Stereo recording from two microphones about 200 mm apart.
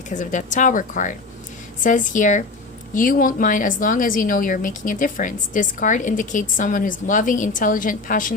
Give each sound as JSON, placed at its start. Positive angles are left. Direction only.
{"t": 0.1, "sound": "a woman's voice", "side_deg": 40}